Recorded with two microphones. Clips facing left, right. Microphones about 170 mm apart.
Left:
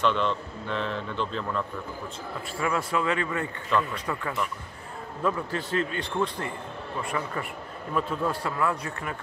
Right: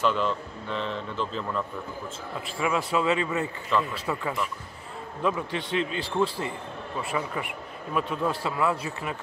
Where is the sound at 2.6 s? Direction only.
20° right (ahead or behind).